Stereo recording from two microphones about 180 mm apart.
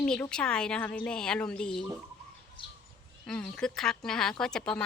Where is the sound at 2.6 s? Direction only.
25° left (ahead or behind).